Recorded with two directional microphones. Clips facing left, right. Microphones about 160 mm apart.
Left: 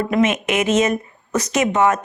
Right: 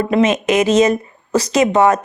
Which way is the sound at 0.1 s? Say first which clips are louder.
Right 5 dB; 35° right (ahead or behind).